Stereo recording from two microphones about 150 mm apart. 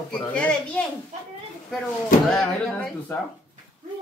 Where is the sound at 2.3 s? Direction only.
5° left (ahead or behind).